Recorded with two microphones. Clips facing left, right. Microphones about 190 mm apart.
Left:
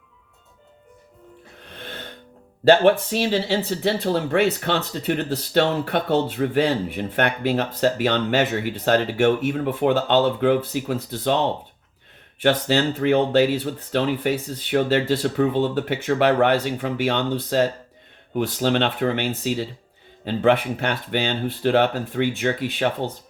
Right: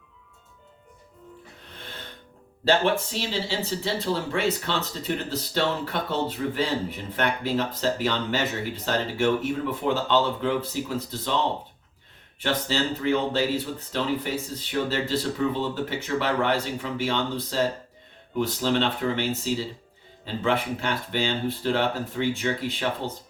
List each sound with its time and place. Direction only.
2.6 s speech: 60° left (ahead or behind)
12.4 s speech: 60° left (ahead or behind)